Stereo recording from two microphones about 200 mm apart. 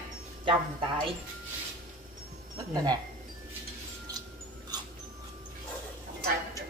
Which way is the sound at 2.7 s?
20° right (ahead or behind).